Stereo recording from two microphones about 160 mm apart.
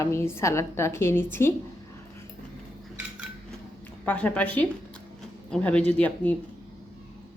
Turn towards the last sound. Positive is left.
turn(degrees=10)  # may be behind; listen again after turning